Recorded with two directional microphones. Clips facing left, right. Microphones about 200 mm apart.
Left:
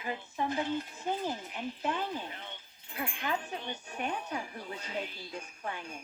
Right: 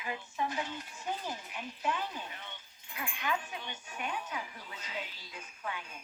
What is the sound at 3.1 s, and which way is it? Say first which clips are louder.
Speech: right 1 dB; 45° left (ahead or behind).